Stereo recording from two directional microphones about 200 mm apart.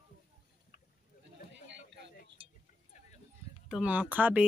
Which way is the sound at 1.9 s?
60° right (ahead or behind).